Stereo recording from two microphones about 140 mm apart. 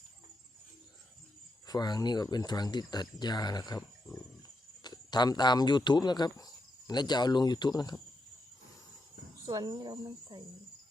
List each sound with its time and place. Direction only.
1.6 s speech: 30° left (ahead or behind)
9.5 s speech: 25° right (ahead or behind)